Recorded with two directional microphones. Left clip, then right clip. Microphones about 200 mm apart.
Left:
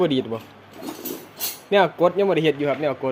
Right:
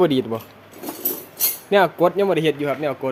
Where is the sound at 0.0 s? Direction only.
25° right (ahead or behind).